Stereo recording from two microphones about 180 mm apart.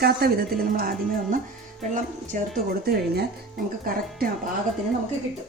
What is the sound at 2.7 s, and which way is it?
Speech, 60° right (ahead or behind).